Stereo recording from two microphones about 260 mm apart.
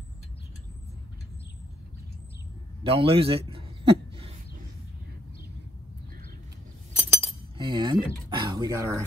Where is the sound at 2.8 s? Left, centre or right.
Right.